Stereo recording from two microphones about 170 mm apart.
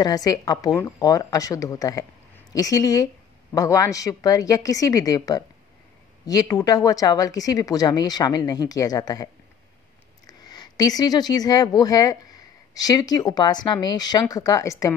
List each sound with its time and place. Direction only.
0.0 s a woman's voice: 20° left (ahead or behind)